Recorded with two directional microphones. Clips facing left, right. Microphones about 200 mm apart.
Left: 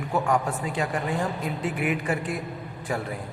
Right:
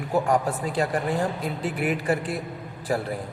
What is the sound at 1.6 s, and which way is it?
Speech, 35° right (ahead or behind).